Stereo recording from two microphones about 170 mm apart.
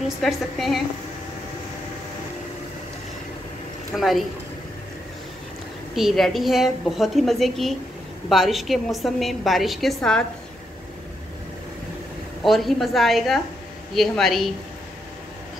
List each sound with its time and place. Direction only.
0.2 s a woman's voice: centre (ahead or behind)
3.9 s a woman's voice: centre (ahead or behind)
5.9 s a woman's voice: centre (ahead or behind)
12.4 s a woman's voice: centre (ahead or behind)